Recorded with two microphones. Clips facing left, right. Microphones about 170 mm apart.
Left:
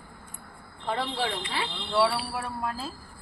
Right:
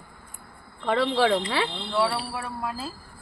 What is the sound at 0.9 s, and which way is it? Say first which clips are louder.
Speech: right 8 dB; 90° right.